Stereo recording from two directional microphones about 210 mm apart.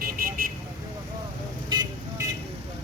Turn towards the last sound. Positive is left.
turn(degrees=-20)  # may be behind; listen again after turning